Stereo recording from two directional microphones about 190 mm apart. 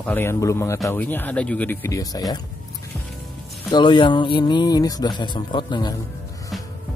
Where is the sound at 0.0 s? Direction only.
10° left (ahead or behind).